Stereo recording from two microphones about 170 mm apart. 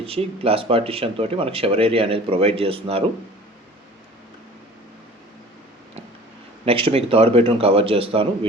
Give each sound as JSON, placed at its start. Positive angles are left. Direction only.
{"t": 0.0, "sound": "speech", "side_deg": -35}
{"t": 6.7, "sound": "speech", "side_deg": -35}